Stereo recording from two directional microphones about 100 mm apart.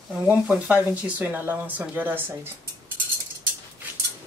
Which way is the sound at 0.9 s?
15° right (ahead or behind).